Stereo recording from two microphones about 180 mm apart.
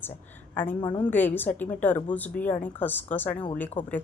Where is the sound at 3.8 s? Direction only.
25° left (ahead or behind).